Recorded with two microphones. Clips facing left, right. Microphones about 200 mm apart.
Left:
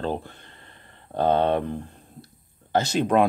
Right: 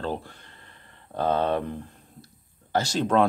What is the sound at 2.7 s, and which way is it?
Speech, 20° left (ahead or behind).